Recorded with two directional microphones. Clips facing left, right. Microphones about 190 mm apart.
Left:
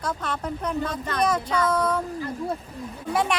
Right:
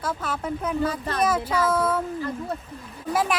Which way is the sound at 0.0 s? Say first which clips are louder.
Even; 5° right (ahead or behind).